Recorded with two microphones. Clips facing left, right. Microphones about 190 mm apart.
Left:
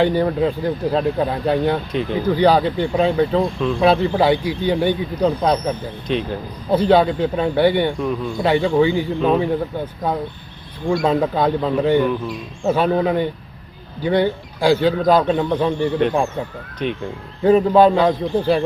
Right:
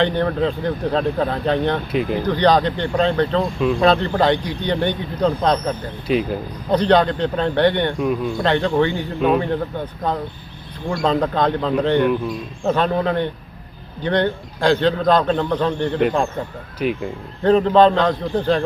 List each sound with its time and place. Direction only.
0.0 s a man's voice: 5° left (ahead or behind)
1.9 s speech: 5° right (ahead or behind)
2.2 s a man's voice: 10° left (ahead or behind)
6.1 s speech: 5° right (ahead or behind)
6.7 s a man's voice: 5° left (ahead or behind)
16.8 s speech: 5° right (ahead or behind)
17.4 s a man's voice: 10° left (ahead or behind)